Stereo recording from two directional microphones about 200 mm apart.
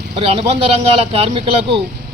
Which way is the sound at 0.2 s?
30° right (ahead or behind).